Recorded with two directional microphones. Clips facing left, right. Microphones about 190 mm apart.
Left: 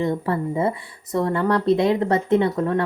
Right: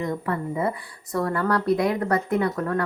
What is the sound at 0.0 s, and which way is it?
Speech, 25° left (ahead or behind).